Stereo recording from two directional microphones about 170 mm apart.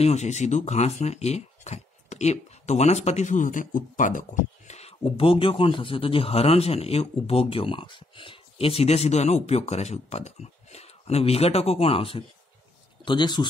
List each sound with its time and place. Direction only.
0.0 s speech: 40° left (ahead or behind)